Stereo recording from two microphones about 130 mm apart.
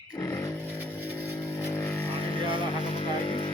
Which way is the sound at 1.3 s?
20° left (ahead or behind).